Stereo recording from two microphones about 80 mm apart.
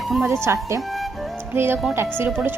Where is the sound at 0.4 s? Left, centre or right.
Right.